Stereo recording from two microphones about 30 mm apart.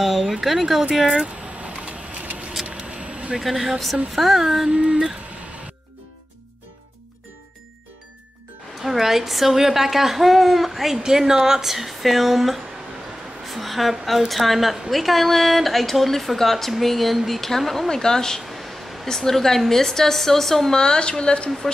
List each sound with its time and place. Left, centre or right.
0.0 s a woman's voice: centre
1.2 s a sound: right
3.3 s a woman's voice: centre
8.8 s speech: centre
11.1 s a woman's voice: centre
20.7 s a woman's voice: left